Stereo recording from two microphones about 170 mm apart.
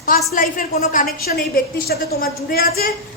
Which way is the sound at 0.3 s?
50° left (ahead or behind).